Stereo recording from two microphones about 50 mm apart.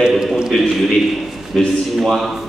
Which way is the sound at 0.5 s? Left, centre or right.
Centre.